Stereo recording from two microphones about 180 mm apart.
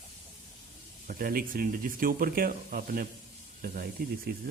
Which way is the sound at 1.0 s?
50° right (ahead or behind).